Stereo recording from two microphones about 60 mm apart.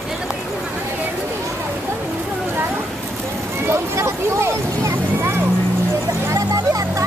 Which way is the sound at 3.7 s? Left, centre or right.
Right.